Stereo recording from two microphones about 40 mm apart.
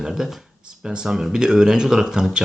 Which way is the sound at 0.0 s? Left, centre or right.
Centre.